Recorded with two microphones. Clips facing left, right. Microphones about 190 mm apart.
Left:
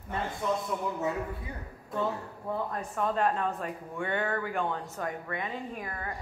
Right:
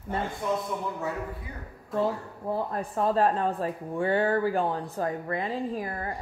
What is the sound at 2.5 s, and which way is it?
Speech, 30° right (ahead or behind).